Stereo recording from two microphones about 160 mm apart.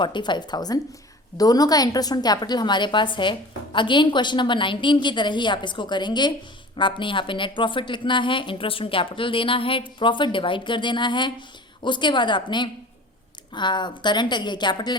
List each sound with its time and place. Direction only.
0.0 s a woman's voice: 30° left (ahead or behind)